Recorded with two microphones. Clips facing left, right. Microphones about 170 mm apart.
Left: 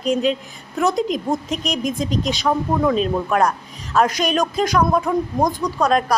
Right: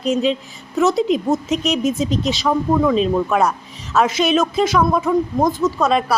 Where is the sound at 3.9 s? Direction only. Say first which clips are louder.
Even; 10° left (ahead or behind).